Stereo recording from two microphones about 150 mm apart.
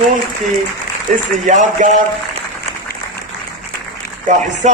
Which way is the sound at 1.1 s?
55° right (ahead or behind).